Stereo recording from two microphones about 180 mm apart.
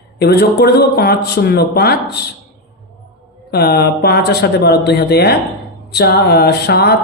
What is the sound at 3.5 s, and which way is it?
Speech, 60° left (ahead or behind).